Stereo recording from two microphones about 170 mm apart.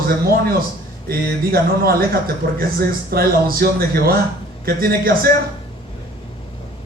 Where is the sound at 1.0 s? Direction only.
65° right (ahead or behind).